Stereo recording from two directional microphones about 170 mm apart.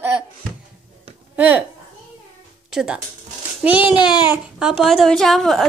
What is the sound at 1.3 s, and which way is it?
Speech, 10° right (ahead or behind).